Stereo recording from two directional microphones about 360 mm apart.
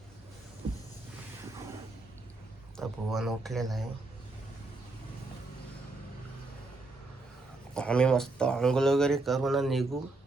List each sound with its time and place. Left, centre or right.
2.7 s speech: centre
7.7 s speech: centre